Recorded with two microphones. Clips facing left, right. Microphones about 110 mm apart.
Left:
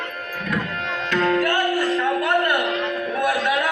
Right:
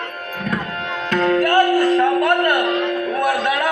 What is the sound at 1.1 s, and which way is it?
Music, 45° right (ahead or behind).